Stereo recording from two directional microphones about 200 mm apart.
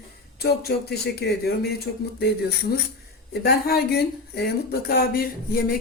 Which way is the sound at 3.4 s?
55° left (ahead or behind).